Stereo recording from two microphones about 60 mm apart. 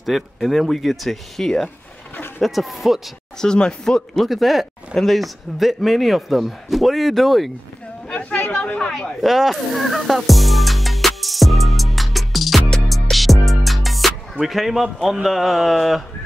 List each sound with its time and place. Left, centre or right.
0.0 s a man's voice: centre
3.3 s speech: centre
4.1 s a man's voice: centre
8.1 s speech: left
8.7 s speech: centre
9.2 s music: centre
14.4 s a man's voice: centre